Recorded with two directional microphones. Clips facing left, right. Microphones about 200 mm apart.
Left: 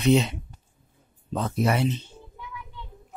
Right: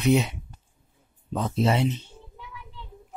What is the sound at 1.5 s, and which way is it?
Speech, 25° right (ahead or behind).